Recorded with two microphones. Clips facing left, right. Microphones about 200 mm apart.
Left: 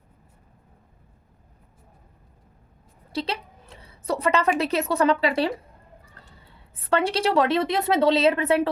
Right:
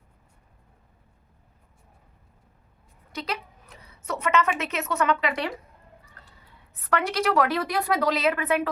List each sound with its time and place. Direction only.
3.1 s a woman's voice: 30° left (ahead or behind)
6.7 s a woman's voice: 25° left (ahead or behind)